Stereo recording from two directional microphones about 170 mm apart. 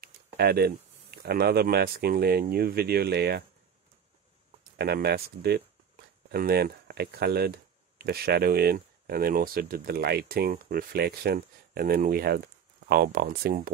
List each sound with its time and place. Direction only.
0.0 s speech: 70° right (ahead or behind)
4.7 s speech: 70° right (ahead or behind)